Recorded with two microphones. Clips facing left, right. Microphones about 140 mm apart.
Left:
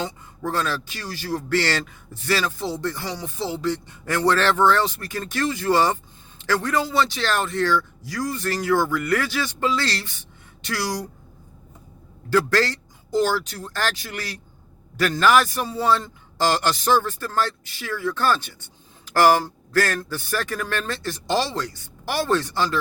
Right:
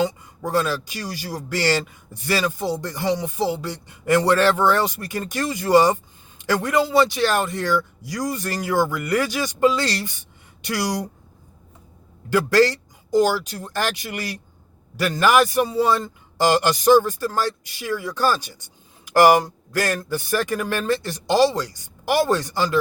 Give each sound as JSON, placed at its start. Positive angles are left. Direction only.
{"t": 0.0, "sound": "speech", "side_deg": -10}
{"t": 12.3, "sound": "speech", "side_deg": -15}